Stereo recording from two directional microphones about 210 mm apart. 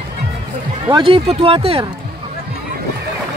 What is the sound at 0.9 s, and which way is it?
Speech, 25° right (ahead or behind).